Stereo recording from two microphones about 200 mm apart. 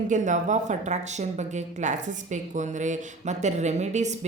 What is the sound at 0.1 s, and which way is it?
Speech, 40° right (ahead or behind).